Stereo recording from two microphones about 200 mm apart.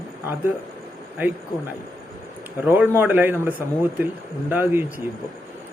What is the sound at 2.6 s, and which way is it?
Speech, 10° right (ahead or behind).